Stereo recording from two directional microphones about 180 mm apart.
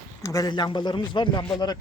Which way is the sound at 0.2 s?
20° left (ahead or behind).